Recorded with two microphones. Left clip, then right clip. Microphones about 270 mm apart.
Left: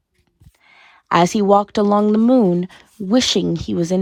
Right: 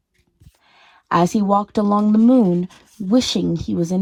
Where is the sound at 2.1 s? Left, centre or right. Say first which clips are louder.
Left 1 dB; right.